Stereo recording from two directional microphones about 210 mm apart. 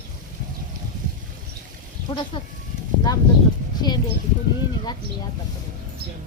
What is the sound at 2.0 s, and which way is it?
Speech, 25° left (ahead or behind).